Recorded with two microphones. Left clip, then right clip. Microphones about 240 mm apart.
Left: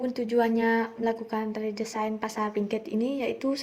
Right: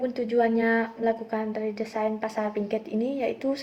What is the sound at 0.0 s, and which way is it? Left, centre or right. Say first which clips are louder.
A woman's voice: right 2 dB; left.